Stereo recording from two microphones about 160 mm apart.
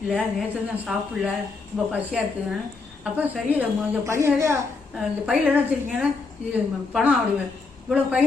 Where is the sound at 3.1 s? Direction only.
10° right (ahead or behind).